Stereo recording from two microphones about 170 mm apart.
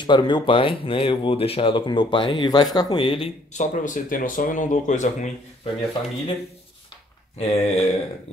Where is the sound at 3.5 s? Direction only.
50° left (ahead or behind).